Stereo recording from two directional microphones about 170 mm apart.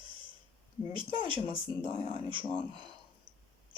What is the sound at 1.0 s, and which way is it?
Speech, 30° right (ahead or behind).